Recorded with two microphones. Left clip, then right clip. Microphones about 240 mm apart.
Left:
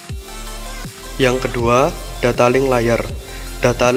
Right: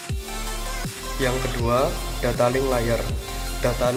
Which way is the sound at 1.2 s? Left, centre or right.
Left.